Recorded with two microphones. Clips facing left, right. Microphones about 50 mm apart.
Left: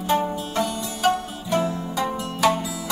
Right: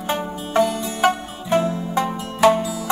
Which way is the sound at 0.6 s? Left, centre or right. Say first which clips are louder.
Right 7 dB; centre.